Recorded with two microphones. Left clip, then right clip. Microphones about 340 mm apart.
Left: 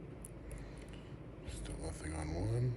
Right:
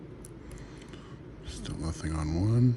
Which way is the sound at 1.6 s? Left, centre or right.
Centre.